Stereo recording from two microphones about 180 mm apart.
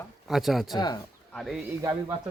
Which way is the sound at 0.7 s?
20° left (ahead or behind).